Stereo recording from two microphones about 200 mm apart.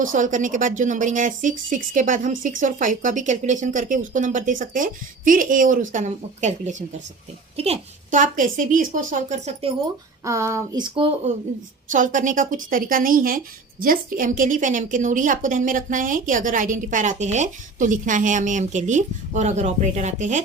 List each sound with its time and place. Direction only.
0.0 s a woman's voice: 40° right (ahead or behind)
10.2 s a woman's voice: 15° right (ahead or behind); by 20.4 s 35° right (ahead or behind)